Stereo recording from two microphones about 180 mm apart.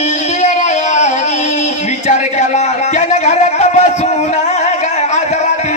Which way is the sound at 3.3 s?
40° left (ahead or behind).